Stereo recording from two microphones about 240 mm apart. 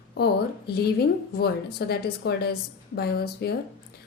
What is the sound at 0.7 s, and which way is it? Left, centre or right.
Speech, left.